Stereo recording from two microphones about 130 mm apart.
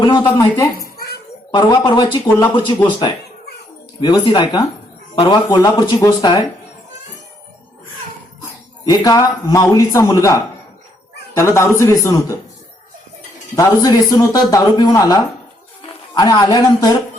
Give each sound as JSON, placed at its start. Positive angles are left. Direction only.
{"t": 0.0, "sound": "speech", "side_deg": 35}
{"t": 0.5, "sound": "a child's voice", "side_deg": 20}
{"t": 4.0, "sound": "a man's voice", "side_deg": 35}
{"t": 8.8, "sound": "speech", "side_deg": 30}
{"t": 11.3, "sound": "speech", "side_deg": 20}
{"t": 13.6, "sound": "speech", "side_deg": 30}